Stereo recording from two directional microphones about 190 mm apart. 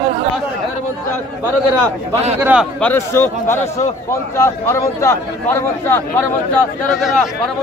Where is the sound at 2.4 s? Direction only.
5° right (ahead or behind).